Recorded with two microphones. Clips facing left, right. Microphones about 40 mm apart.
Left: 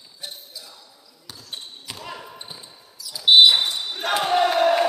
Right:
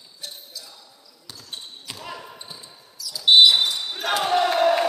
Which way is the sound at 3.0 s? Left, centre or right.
Left.